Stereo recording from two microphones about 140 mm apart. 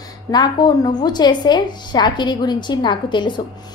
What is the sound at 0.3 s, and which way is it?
A woman's voice, 30° left (ahead or behind).